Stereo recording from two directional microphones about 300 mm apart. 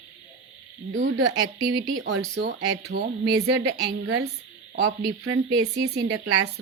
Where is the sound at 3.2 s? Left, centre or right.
Right.